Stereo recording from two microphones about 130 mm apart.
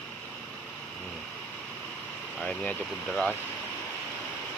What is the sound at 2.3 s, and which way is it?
Speech, 10° left (ahead or behind).